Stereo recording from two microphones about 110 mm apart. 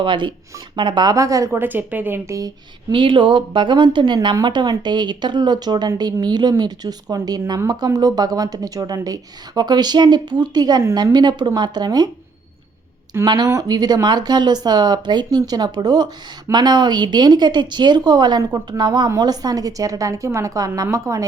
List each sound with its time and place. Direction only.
0.0 s a woman's voice: 45° right (ahead or behind); by 2.5 s 30° right (ahead or behind)
2.9 s speech: 50° right (ahead or behind)
13.2 s a woman's voice: 40° right (ahead or behind)